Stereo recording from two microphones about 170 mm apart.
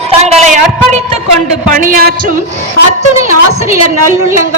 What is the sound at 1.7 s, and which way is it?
Speech, 55° right (ahead or behind).